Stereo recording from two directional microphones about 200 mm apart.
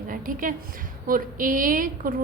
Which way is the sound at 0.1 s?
45° right (ahead or behind).